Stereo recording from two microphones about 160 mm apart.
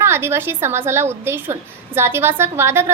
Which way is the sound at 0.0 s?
15° right (ahead or behind).